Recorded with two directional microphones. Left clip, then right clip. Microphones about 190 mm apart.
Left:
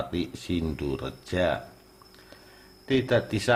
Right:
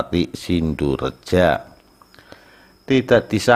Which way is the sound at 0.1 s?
40° right (ahead or behind).